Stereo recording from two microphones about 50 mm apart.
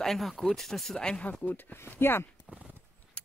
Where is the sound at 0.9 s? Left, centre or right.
Centre.